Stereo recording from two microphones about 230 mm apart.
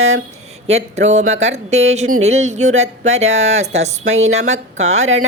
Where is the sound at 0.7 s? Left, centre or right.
Right.